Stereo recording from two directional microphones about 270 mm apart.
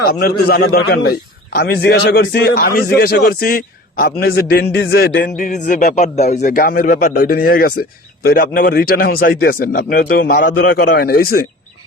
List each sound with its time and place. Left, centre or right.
0.0 s a man's voice: left